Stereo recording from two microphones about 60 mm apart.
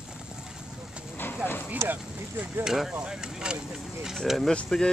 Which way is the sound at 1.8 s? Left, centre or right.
Right.